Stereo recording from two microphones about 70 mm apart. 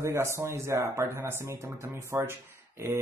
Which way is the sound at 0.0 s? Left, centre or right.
Right.